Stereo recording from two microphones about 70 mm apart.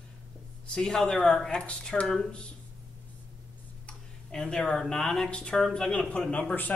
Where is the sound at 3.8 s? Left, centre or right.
Centre.